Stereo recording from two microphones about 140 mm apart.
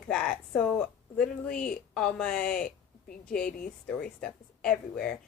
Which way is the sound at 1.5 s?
90° left.